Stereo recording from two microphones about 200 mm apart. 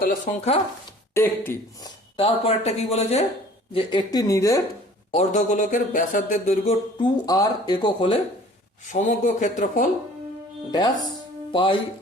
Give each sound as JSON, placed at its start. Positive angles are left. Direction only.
{"t": 0.3, "sound": "speech", "side_deg": 40}
{"t": 1.1, "sound": "speech", "side_deg": 10}
{"t": 2.1, "sound": "speech", "side_deg": 30}
{"t": 5.1, "sound": "speech", "side_deg": 40}
{"t": 7.0, "sound": "speech", "side_deg": 20}
{"t": 8.9, "sound": "speech", "side_deg": 40}
{"t": 10.7, "sound": "speech", "side_deg": 20}